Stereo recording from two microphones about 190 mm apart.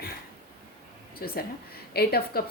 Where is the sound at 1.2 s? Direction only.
50° left (ahead or behind).